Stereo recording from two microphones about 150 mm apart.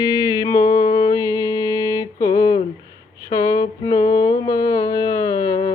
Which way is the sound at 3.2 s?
20° left (ahead or behind).